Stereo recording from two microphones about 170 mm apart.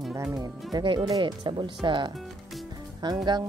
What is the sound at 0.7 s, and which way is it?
Speech, 30° right (ahead or behind).